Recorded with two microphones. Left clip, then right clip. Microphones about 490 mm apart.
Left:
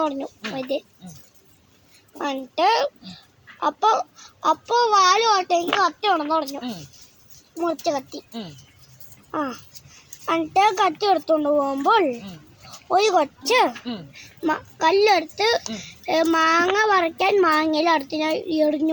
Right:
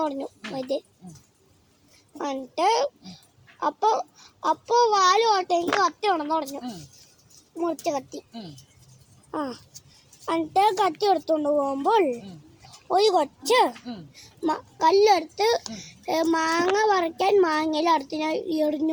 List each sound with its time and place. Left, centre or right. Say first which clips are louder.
0.0 s a child's voice: left 3 dB; right
2.1 s a child's voice: left 3 dB; right
7.6 s a child's voice: left 3 dB; right
9.3 s a child's voice: left 4 dB; right